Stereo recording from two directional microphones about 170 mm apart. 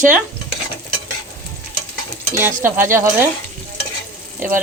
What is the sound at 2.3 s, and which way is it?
Stir, 15° right (ahead or behind).